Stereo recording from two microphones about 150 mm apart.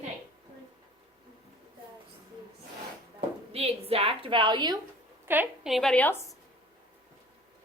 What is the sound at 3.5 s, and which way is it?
A woman's voice, 40° right (ahead or behind).